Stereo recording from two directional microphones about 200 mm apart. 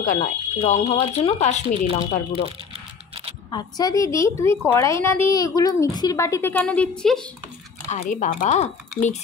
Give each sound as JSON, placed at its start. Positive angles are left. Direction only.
{"t": 0.0, "sound": "speech", "side_deg": 40}
{"t": 0.7, "sound": "a woman's voice", "side_deg": 30}
{"t": 7.9, "sound": "speech", "side_deg": 40}